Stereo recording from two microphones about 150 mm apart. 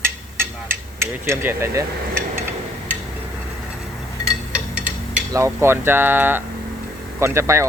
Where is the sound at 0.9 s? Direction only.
15° right (ahead or behind).